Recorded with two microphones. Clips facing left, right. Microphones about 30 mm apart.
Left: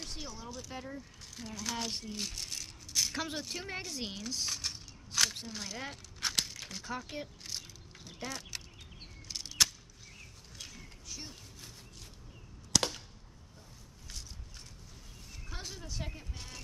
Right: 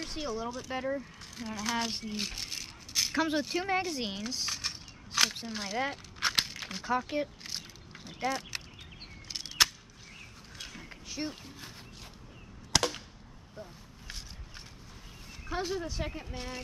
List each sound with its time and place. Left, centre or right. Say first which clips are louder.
0.0 s speech: right 9 dB; centre
1.2 s rattle: right 5 dB; centre
9.3 s a sound: right 3 dB; right
12.7 s whip: right 2 dB; right
13.6 s a sound: right 11 dB; right
15.4 s speech: right 12 dB; right